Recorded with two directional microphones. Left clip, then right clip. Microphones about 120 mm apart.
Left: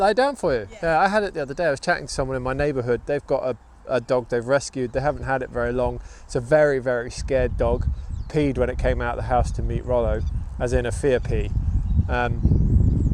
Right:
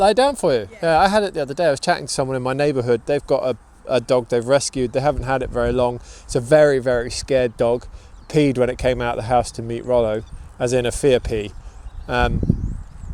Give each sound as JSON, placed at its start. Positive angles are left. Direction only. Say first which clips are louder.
{"t": 0.0, "sound": "speech", "louder": "right 4 dB", "side_deg": -40}